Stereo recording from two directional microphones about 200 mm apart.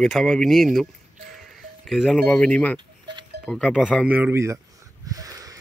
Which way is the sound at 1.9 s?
Centre (ahead or behind).